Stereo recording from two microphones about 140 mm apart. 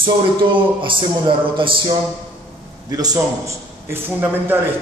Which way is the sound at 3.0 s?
25° right (ahead or behind).